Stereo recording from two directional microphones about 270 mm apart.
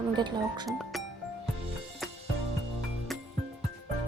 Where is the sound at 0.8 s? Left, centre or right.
Centre.